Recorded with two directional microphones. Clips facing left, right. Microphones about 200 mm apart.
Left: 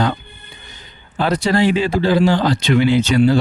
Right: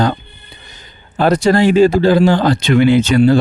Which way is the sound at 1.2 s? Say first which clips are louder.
Right 5 dB; 45° right (ahead or behind).